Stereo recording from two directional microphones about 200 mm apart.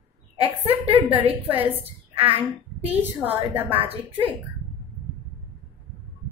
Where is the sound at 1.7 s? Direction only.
30° right (ahead or behind).